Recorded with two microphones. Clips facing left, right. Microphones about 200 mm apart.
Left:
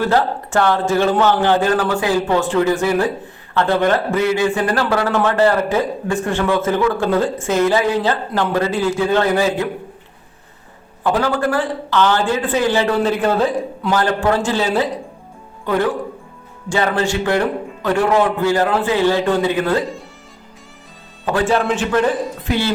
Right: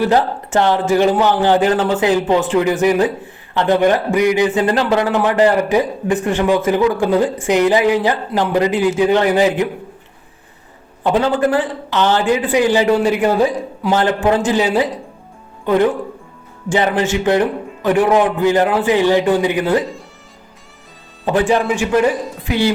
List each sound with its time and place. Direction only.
0.0 s a man's voice: 20° right (ahead or behind)
11.0 s a man's voice: 20° right (ahead or behind)
21.2 s a man's voice: 20° right (ahead or behind)